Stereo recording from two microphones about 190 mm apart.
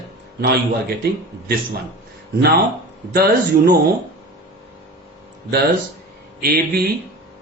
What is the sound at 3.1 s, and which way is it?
Speech, 55° right (ahead or behind).